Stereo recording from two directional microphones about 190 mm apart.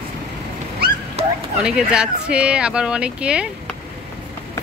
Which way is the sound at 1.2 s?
30° right (ahead or behind).